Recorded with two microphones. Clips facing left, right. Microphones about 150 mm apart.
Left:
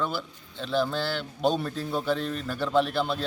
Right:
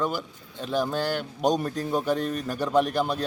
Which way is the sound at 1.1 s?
45° right (ahead or behind).